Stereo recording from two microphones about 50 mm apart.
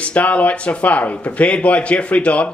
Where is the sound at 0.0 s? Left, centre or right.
Left.